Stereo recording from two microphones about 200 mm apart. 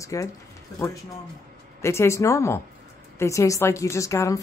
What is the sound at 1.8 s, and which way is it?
A woman's voice, 15° left (ahead or behind).